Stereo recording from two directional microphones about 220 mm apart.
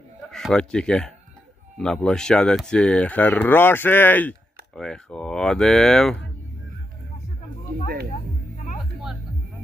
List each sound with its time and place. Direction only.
0.3 s speech: 5° left (ahead or behind)
8.5 s music: 35° left (ahead or behind)